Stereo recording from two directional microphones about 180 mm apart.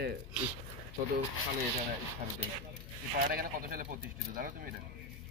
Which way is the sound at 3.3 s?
50° right (ahead or behind).